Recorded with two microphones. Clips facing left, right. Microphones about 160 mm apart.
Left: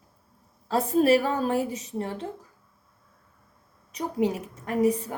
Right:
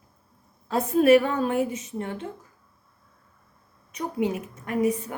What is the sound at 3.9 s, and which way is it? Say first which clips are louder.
A woman's voice: left 1 dB; 35° left (ahead or behind).